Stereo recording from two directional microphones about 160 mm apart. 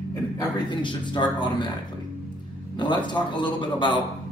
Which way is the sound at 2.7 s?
30° left (ahead or behind).